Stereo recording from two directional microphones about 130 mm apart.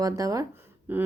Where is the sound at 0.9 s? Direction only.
15° right (ahead or behind).